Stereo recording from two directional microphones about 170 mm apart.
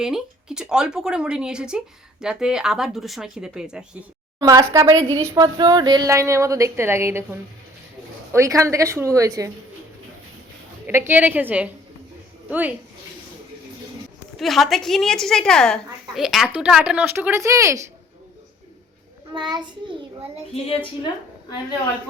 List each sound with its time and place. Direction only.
0.0 s a woman's voice: 5° right (ahead or behind)
4.4 s a woman's voice: 20° right (ahead or behind)
10.8 s a woman's voice: 10° right (ahead or behind)
14.3 s a woman's voice: centre (ahead or behind); by 17.8 s 15° right (ahead or behind)
19.3 s a child's voice: 25° right (ahead or behind)
20.5 s a woman's voice: 35° left (ahead or behind)